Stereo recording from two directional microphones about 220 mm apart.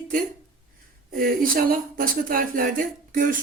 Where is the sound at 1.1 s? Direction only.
40° right (ahead or behind).